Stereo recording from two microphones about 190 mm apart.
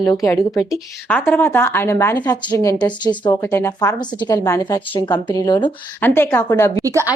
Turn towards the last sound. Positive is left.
turn(degrees=-15)  # may be behind; listen again after turning